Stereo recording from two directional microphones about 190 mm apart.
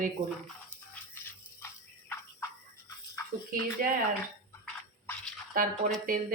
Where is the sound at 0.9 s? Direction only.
10° left (ahead or behind).